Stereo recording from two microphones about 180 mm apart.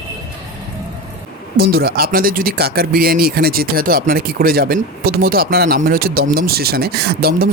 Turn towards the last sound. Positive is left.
turn(degrees=-60)  # may be behind; listen again after turning